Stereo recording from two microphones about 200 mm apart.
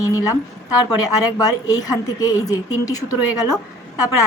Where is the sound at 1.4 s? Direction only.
20° left (ahead or behind).